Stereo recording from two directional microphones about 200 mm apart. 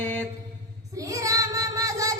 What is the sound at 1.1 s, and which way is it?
Child singing, 15° right (ahead or behind).